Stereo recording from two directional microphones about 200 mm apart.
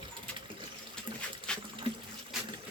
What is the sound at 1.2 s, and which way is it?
Dog, 5° left (ahead or behind).